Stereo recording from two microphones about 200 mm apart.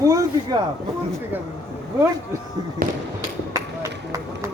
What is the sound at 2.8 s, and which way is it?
Speech, 45° right (ahead or behind).